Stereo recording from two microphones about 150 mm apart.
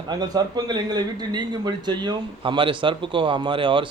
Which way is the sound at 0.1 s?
25° right (ahead or behind).